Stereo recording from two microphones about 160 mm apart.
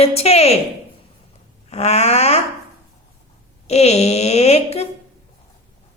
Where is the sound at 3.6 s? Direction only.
40° left (ahead or behind).